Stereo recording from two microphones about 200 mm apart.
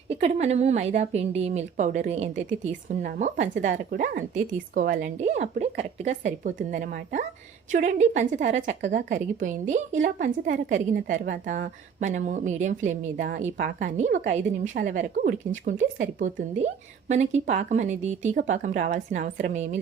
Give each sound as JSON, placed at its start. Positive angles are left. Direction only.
{"t": 0.1, "sound": "a woman's voice", "side_deg": -30}